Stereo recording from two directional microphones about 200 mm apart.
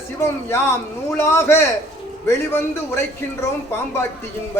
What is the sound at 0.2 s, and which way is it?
A man's voice, 15° left (ahead or behind).